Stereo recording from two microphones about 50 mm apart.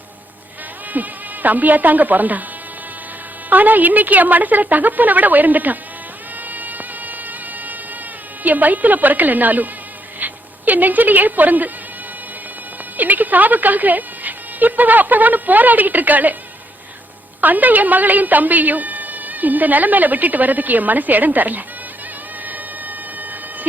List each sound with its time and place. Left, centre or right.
0.9 s a woman's voice: right
3.5 s a woman's voice: right
6.5 s music: right
8.4 s a woman's voice: right
13.0 s a woman's voice: right
17.4 s a woman's voice: right
22.4 s a sound: right